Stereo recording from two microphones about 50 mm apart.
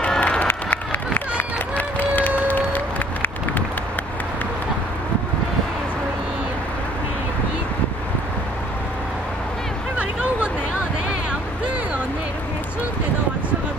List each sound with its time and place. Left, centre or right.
0.2 s crowd: left
1.8 s run: left
2.4 s music: left